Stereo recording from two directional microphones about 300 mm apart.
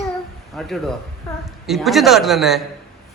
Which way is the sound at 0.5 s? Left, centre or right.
Centre.